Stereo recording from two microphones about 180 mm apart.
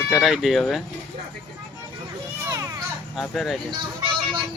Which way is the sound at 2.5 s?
15° right (ahead or behind).